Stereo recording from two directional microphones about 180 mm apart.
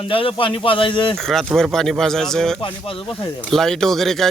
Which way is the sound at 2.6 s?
30° left (ahead or behind).